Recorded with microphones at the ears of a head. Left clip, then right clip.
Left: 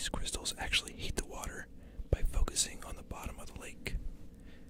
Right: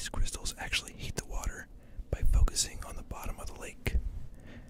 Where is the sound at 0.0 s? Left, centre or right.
Centre.